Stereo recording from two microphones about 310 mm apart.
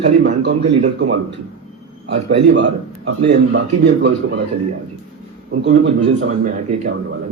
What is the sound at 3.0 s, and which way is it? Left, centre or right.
Speech, right.